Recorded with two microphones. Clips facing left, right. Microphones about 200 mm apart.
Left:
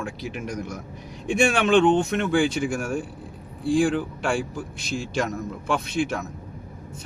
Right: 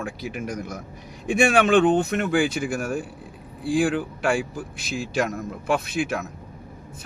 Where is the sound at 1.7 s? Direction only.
55° right (ahead or behind).